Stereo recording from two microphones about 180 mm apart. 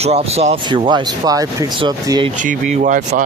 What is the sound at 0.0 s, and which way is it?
Speech, 35° right (ahead or behind).